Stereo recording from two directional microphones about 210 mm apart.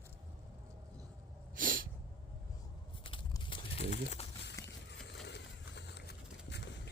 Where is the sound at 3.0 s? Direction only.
25° left (ahead or behind).